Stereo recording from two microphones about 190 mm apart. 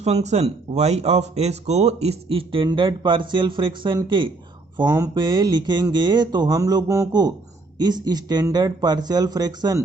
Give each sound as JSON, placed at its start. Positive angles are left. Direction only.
{"t": 0.0, "sound": "speech", "side_deg": -35}